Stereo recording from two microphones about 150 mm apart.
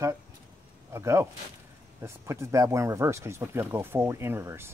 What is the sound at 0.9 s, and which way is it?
Speech, 20° right (ahead or behind).